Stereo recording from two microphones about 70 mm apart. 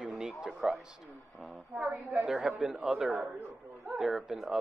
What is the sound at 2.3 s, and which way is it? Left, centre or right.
Speech, centre.